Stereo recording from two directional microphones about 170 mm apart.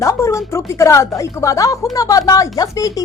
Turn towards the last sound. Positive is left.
turn(degrees=20)  # may be behind; listen again after turning